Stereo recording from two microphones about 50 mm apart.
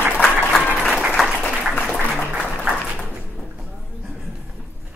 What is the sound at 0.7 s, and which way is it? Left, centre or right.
Applause, centre.